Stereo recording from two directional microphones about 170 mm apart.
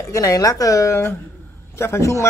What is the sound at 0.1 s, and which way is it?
Speech, 20° left (ahead or behind).